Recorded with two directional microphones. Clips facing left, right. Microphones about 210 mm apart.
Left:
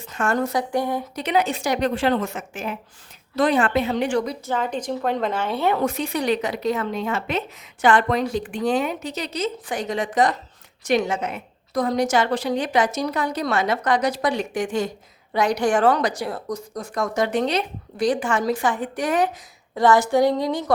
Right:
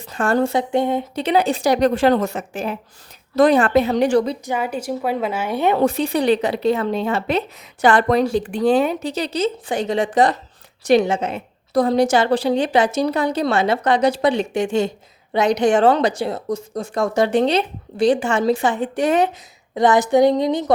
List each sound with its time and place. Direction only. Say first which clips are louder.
0.0 s a woman's voice: right 4 dB; 35° right (ahead or behind)
4.4 s a woman's voice: right 2 dB; 10° right (ahead or behind)
5.8 s a woman's voice: right 5 dB; 30° right (ahead or behind)